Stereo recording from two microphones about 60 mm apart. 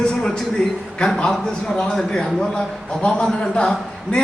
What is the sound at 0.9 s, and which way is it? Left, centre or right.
A man's voice, centre.